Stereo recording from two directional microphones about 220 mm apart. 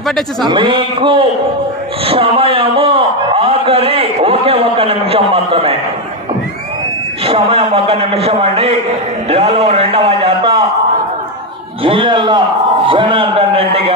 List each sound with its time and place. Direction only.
0.5 s a man's voice: 25° right (ahead or behind)
2.0 s a sound: 25° right (ahead or behind)
7.2 s a man's voice: 25° right (ahead or behind)
11.8 s a man's voice: 25° right (ahead or behind)